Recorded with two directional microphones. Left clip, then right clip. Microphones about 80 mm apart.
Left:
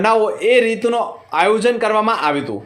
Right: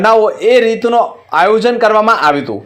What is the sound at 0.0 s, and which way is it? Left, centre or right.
A man's voice, right.